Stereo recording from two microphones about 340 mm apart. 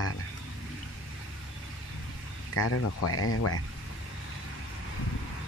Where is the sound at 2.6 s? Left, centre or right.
Left.